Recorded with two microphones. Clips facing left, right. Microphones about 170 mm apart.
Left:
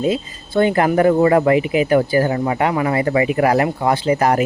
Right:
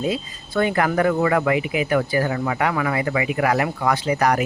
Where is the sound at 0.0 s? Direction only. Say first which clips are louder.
Left 5 dB; 25° left (ahead or behind).